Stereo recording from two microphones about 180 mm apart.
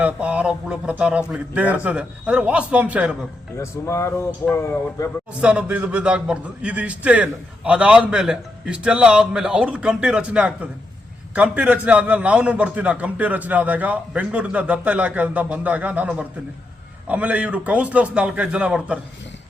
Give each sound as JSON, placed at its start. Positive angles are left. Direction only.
{"t": 0.0, "sound": "a man's voice", "side_deg": -5}
{"t": 3.6, "sound": "speech", "side_deg": 15}
{"t": 5.4, "sound": "a man's voice", "side_deg": -5}